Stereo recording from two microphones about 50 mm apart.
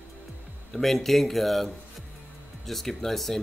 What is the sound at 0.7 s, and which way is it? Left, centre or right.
A man's voice, centre.